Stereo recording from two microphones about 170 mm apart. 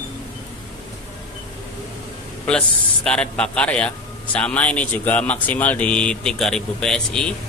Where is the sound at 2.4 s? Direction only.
5° left (ahead or behind).